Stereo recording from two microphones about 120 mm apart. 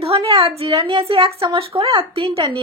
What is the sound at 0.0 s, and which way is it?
A woman's voice, 55° right (ahead or behind).